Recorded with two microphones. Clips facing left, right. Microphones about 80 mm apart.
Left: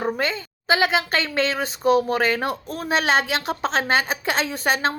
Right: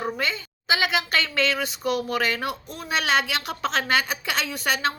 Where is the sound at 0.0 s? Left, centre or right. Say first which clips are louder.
Left 3 dB; left.